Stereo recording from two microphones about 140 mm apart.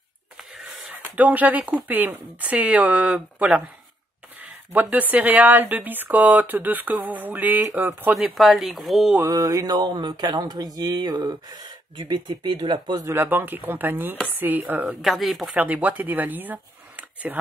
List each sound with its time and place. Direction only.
1.1 s speech: 10° right (ahead or behind)
4.7 s speech: 10° right (ahead or behind)
8.1 s speech: centre (ahead or behind)
9.3 s speech: 25° right (ahead or behind)
13.1 s speech: 15° right (ahead or behind)
15.0 s speech: centre (ahead or behind)
15.5 s speech: 10° right (ahead or behind)